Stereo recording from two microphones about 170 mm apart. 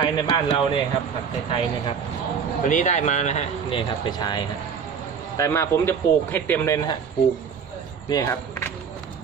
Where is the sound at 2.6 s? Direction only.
50° left (ahead or behind).